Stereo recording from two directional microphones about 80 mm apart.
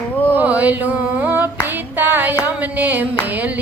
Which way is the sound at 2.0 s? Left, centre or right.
Right.